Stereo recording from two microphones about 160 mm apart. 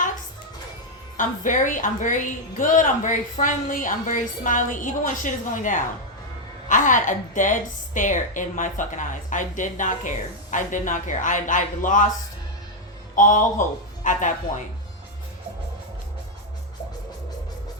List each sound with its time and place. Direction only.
1.1 s a woman's voice: 55° left (ahead or behind)
13.1 s a woman's voice: 55° left (ahead or behind)